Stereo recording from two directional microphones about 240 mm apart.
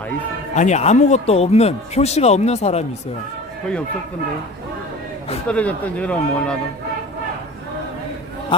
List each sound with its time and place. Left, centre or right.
0.5 s speech: left
5.5 s speech: centre